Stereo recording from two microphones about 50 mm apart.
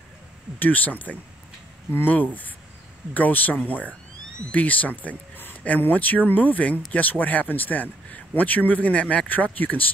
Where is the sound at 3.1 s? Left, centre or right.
Left.